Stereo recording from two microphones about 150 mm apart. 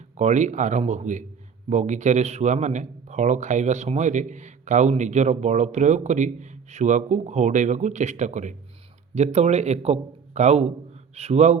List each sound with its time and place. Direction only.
0.2 s a man's voice: 55° right (ahead or behind)